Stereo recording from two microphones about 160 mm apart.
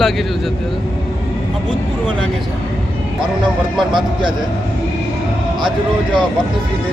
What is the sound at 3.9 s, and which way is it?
Speech, 30° right (ahead or behind).